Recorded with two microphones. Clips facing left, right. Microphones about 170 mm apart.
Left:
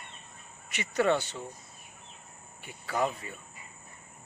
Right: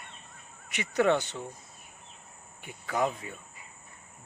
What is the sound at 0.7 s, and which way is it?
Speech, 15° right (ahead or behind).